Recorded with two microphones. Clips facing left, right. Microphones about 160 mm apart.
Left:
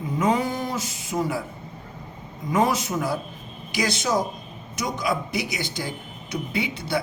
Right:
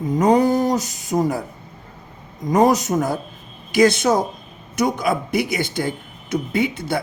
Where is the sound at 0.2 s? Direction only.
40° right (ahead or behind).